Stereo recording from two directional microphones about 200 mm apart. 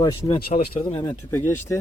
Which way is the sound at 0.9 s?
15° left (ahead or behind).